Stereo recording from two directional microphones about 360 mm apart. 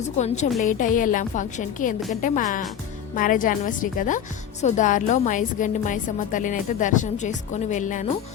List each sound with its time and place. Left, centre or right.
0.6 s a woman's voice: left